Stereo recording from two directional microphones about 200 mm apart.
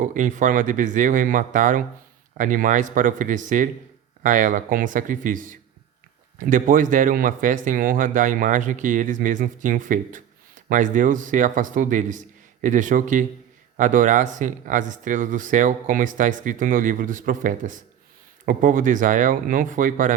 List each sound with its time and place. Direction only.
0.0 s speech: 40° right (ahead or behind)